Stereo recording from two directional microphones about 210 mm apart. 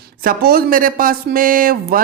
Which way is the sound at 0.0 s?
45° right (ahead or behind).